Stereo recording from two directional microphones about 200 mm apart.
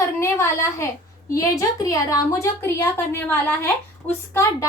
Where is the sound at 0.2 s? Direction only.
15° left (ahead or behind).